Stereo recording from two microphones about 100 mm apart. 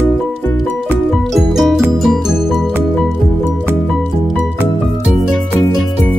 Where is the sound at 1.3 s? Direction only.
Centre (ahead or behind).